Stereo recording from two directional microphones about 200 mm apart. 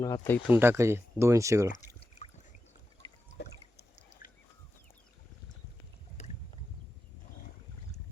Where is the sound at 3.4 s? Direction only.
55° left (ahead or behind).